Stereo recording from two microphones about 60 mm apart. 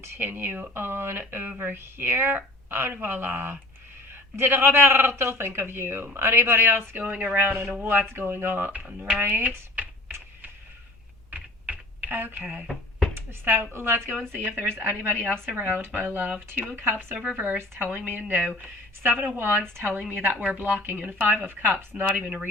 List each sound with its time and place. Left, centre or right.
0.0 s speech: right
7.0 s speech: right
7.3 s speech: right
7.7 s speech: right
7.9 s speech: right
8.9 s speech: centre
9.1 s speech: right
11.3 s typing: right
12.4 s speech: right
16.7 s speech: right
17.2 s speech: right
19.5 s a woman's voice: right
19.8 s speech: right
22.2 s speech: centre